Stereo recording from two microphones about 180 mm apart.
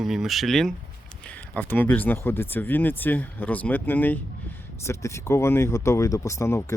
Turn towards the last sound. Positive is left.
turn(degrees=15)  # may be behind; listen again after turning